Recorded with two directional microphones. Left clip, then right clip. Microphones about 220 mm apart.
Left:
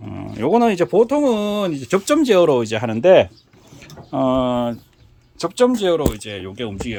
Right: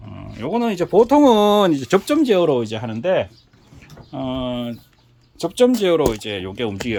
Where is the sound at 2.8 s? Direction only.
25° left (ahead or behind).